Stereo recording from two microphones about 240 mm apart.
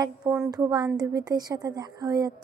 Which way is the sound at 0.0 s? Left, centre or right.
Centre.